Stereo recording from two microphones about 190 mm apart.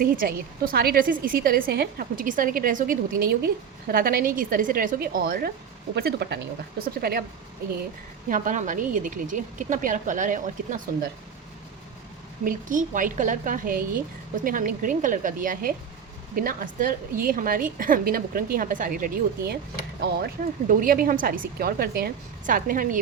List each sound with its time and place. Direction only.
0.0 s a woman's voice: 50° right (ahead or behind)
8.3 s a woman's voice: 40° right (ahead or behind)
12.5 s a woman's voice: 45° right (ahead or behind)
20.7 s a woman's voice: 45° right (ahead or behind)